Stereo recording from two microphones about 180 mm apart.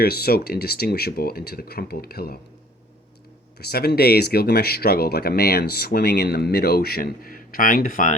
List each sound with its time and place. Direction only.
0.0 s speech: 60° left (ahead or behind)
3.6 s speech: 60° left (ahead or behind)